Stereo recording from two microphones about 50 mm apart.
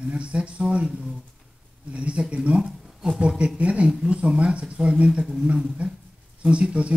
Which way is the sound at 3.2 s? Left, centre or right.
Right.